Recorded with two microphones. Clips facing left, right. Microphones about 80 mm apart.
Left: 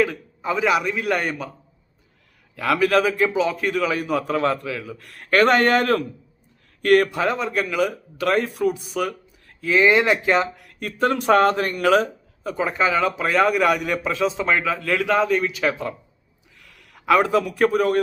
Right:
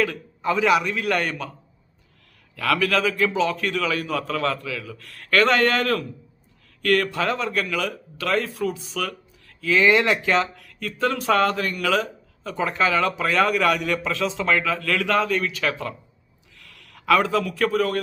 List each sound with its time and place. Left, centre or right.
0.0 s a man's voice: centre
2.6 s a man's voice: left
3.3 s a man's voice: centre
12.4 s a man's voice: centre